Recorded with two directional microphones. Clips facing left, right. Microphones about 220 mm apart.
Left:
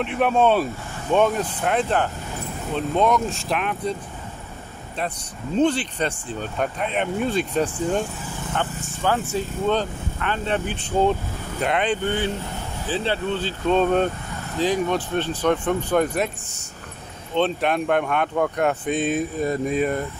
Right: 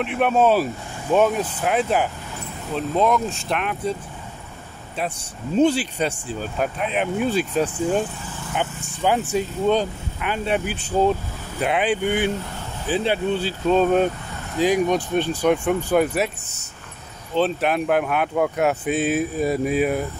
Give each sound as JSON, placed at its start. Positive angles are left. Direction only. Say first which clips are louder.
{"t": 0.0, "sound": "speech", "louder": "right 1 dB", "side_deg": 0}
{"t": 5.6, "sound": "speech", "louder": "right 2 dB", "side_deg": -10}